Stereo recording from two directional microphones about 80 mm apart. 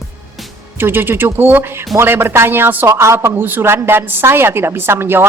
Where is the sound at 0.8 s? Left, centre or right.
Right.